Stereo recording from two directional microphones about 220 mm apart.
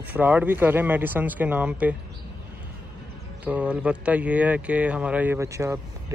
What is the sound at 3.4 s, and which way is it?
Speech, 5° right (ahead or behind).